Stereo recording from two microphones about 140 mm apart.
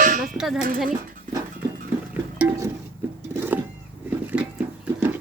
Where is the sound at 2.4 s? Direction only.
15° right (ahead or behind).